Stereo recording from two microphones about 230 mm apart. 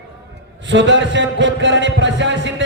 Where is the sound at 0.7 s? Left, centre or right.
Right.